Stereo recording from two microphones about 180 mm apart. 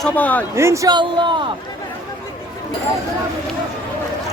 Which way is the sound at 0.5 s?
15° right (ahead or behind).